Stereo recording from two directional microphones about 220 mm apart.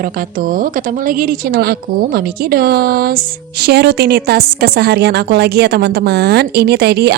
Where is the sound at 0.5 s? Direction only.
40° right (ahead or behind).